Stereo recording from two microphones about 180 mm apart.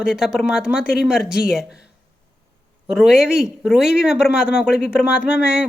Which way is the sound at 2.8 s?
5° right (ahead or behind).